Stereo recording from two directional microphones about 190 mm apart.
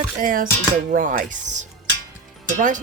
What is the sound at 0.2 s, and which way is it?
Speech, 45° right (ahead or behind).